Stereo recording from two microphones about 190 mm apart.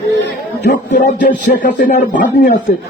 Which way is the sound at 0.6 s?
45° left (ahead or behind).